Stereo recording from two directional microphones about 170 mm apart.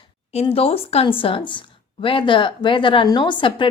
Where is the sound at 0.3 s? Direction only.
35° left (ahead or behind).